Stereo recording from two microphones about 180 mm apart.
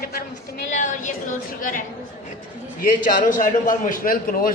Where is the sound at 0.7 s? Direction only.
45° left (ahead or behind).